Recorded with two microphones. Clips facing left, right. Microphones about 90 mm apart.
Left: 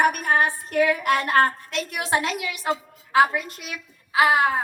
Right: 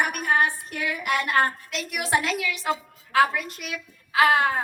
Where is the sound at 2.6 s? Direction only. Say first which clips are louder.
Left 1 dB; 20° left (ahead or behind).